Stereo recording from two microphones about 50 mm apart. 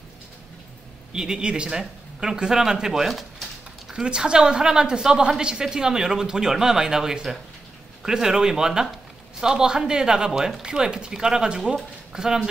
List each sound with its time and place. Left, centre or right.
1.1 s a woman's voice: centre
3.9 s a woman's voice: centre